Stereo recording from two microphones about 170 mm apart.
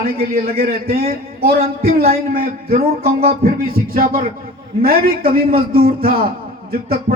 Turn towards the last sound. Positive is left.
turn(degrees=-60)  # may be behind; listen again after turning